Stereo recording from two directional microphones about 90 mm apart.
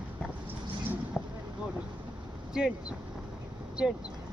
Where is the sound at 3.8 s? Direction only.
10° right (ahead or behind).